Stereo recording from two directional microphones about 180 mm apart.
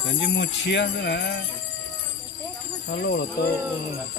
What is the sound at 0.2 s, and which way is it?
Speech, 80° left.